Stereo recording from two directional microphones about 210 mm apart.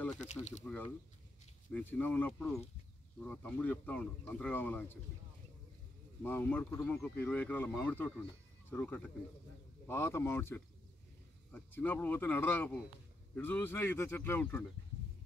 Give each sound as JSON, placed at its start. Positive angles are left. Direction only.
{"t": 0.1, "sound": "speech", "side_deg": 35}
{"t": 0.7, "sound": "speech", "side_deg": 5}
{"t": 6.2, "sound": "speech", "side_deg": 10}